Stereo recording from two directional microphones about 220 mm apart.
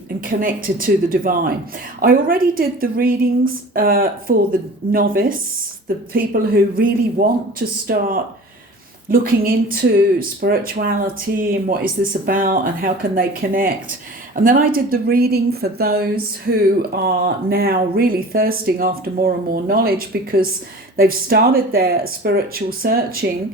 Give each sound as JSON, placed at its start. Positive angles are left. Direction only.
{"t": 0.3, "sound": "speech", "side_deg": -40}